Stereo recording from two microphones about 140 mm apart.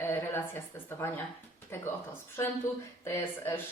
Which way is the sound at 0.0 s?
15° left (ahead or behind).